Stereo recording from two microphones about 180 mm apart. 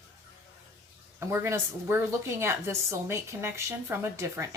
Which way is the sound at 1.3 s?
15° right (ahead or behind).